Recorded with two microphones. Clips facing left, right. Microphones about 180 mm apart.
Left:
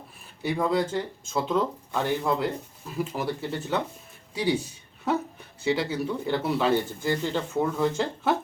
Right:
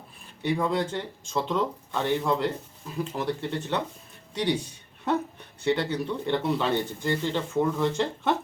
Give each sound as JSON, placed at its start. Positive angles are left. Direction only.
{"t": 0.4, "sound": "speech", "side_deg": 0}
{"t": 5.6, "sound": "speech", "side_deg": 5}